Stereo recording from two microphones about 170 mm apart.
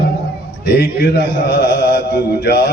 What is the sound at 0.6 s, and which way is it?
Mantra, 75° left (ahead or behind).